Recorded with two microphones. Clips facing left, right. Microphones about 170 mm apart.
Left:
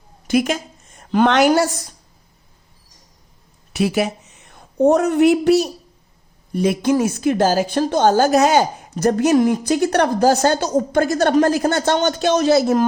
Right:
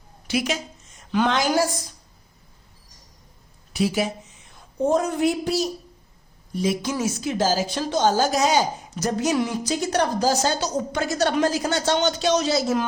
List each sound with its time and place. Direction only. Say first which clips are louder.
0.3 s a woman's voice: left 7 dB; 50° left (ahead or behind)
3.7 s a woman's voice: left 4 dB; 65° left (ahead or behind)